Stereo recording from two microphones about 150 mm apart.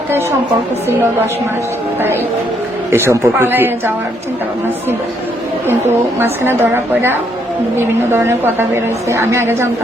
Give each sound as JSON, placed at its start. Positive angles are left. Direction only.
{"t": 0.1, "sound": "a woman's voice", "side_deg": -15}
{"t": 2.0, "sound": "a woman's voice", "side_deg": -15}
{"t": 6.1, "sound": "a woman's voice", "side_deg": -15}